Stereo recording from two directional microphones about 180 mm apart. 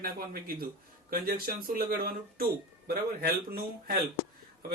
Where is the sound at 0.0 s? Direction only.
55° right (ahead or behind).